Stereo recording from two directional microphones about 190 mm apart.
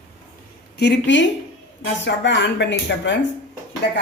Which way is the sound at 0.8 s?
65° left (ahead or behind).